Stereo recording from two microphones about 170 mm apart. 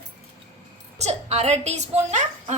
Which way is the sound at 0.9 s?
40° right (ahead or behind).